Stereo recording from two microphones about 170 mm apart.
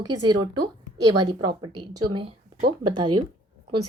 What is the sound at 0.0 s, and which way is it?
A woman's voice, 20° right (ahead or behind).